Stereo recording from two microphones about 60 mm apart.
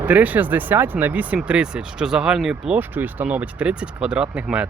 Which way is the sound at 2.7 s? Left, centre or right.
Right.